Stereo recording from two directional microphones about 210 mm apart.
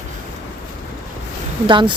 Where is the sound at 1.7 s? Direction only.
20° right (ahead or behind).